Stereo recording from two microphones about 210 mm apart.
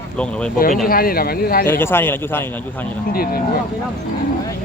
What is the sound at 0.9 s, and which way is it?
Speech, 45° left (ahead or behind).